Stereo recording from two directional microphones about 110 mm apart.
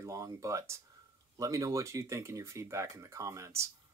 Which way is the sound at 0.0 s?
30° right (ahead or behind).